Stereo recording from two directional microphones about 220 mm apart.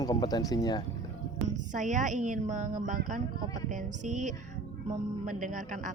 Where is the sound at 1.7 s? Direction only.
35° right (ahead or behind).